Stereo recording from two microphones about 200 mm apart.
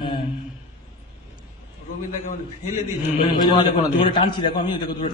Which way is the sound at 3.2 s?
25° left (ahead or behind).